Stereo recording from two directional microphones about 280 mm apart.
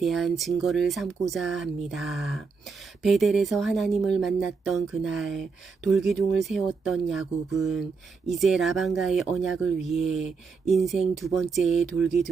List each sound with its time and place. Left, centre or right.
0.0 s speech: centre